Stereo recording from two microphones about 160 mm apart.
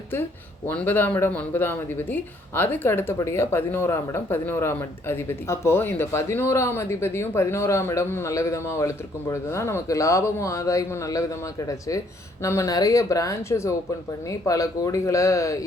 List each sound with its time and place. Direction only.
0.7 s a man's voice: 10° left (ahead or behind)
12.4 s a man's voice: 20° left (ahead or behind)